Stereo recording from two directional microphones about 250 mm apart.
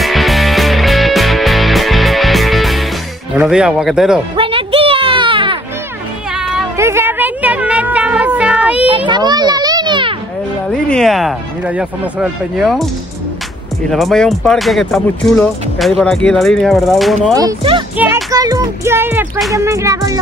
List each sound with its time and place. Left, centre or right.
0.0 s music: centre
3.3 s speech: centre
4.4 s a sound: right
6.3 s music: centre
8.8 s a sound: centre
10.7 s speech: centre
13.8 s speech: centre
17.3 s speech: centre